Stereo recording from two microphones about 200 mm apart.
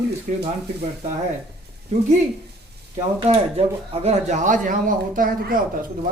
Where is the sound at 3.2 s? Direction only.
30° right (ahead or behind).